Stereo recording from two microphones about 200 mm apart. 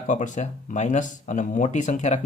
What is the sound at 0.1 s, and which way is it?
Speech, 40° left (ahead or behind).